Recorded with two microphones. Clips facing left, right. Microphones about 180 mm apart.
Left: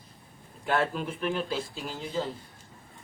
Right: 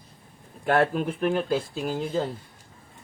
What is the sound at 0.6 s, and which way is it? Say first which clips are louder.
Speech: right 6 dB; 60° right (ahead or behind).